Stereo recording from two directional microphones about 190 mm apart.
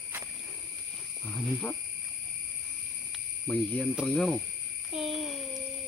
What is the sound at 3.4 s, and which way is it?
Speech, 10° left (ahead or behind).